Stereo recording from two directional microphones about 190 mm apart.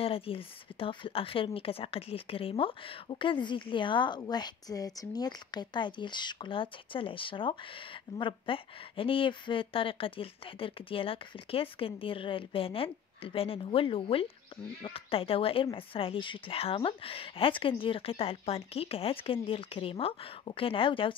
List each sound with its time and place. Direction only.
0.0 s speech: 30° left (ahead or behind)